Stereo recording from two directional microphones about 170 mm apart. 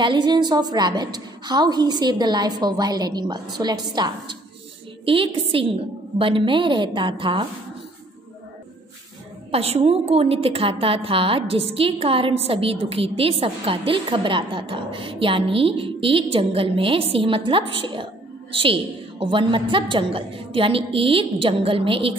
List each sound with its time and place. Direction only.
0.0 s a woman's voice: 25° right (ahead or behind)
9.5 s a woman's voice: 35° right (ahead or behind)